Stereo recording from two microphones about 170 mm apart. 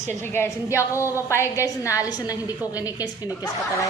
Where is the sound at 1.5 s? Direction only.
20° left (ahead or behind).